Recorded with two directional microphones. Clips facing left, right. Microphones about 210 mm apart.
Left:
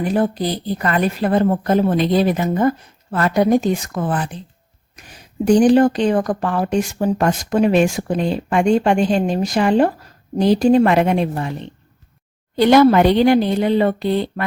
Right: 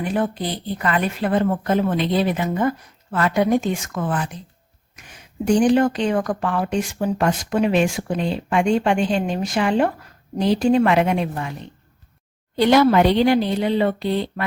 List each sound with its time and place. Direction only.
0.0 s speech: 35° left (ahead or behind)
5.5 s speech: 35° left (ahead or behind)
12.5 s speech: 50° left (ahead or behind)